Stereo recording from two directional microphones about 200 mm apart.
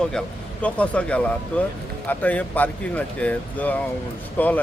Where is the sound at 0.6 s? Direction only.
5° left (ahead or behind).